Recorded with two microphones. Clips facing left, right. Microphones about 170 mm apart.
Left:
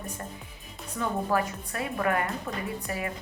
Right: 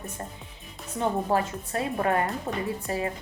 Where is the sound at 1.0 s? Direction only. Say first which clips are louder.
Right 2 dB; 30° right (ahead or behind).